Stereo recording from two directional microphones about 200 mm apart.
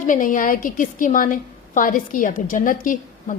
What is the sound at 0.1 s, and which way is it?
A woman's voice, 40° left (ahead or behind).